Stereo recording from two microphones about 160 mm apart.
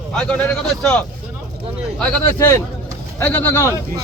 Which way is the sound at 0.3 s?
5° left (ahead or behind).